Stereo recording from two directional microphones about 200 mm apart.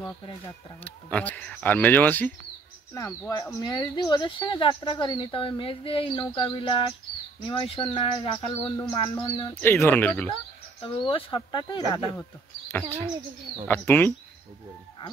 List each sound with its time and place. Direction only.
1.1 s speech: 5° left (ahead or behind)
9.6 s speech: 10° left (ahead or behind)
10.8 s speech: 25° left (ahead or behind)
13.7 s speech: 10° left (ahead or behind)